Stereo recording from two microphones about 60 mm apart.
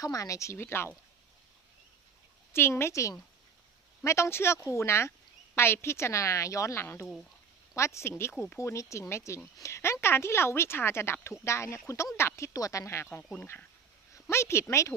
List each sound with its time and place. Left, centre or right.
0.0 s speech: left
0.5 s speech: left
2.5 s a woman's voice: left
2.9 s speech: left
6.7 s speech: left
8.2 s speech: left
8.5 s speech: left
12.5 s speech: left
14.3 s speech: left